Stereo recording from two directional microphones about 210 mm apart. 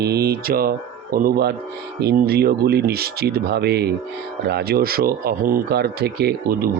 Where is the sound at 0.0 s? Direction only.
50° right (ahead or behind).